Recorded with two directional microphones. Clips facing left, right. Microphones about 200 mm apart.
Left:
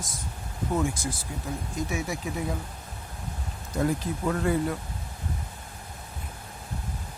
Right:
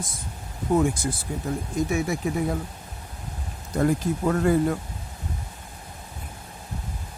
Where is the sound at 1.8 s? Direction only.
55° right (ahead or behind).